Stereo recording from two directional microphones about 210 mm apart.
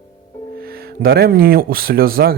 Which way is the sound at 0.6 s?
45° right (ahead or behind).